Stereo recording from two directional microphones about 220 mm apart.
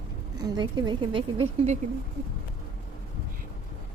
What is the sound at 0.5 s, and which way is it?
A woman's voice, 20° right (ahead or behind).